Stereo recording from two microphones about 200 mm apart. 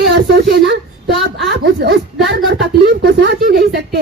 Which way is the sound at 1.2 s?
55° right (ahead or behind).